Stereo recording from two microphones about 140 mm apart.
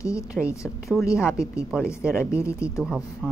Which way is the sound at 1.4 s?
20° left (ahead or behind).